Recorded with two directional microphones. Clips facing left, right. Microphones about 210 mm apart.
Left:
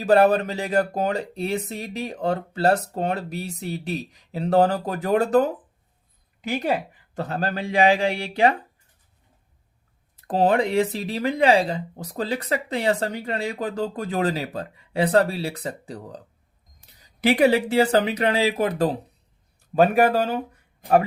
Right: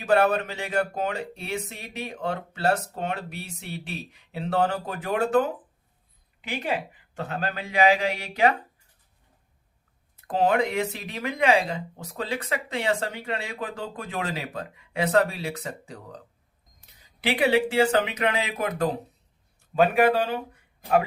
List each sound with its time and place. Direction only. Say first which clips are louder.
0.0 s speech: left 4 dB; 35° left (ahead or behind)
10.2 s speech: left 3 dB; 35° left (ahead or behind)